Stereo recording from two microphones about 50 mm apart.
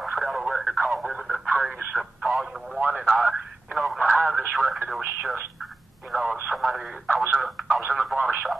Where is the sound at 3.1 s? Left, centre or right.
Centre.